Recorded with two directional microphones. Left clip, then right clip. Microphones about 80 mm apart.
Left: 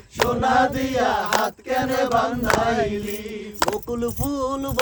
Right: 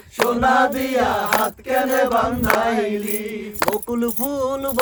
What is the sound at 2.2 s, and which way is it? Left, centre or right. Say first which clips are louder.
Chant: right 2 dB; right.